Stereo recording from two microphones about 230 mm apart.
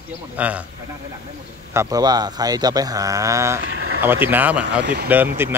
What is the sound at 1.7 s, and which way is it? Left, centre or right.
Speech, centre.